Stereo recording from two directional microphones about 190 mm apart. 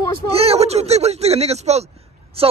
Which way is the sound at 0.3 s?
30° right (ahead or behind).